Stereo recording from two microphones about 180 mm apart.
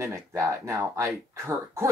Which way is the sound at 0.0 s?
15° right (ahead or behind).